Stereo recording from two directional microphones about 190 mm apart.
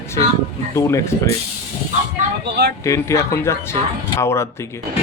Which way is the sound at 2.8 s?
15° left (ahead or behind).